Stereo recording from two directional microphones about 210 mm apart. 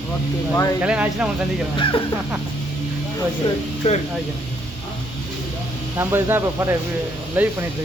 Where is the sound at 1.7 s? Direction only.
25° left (ahead or behind).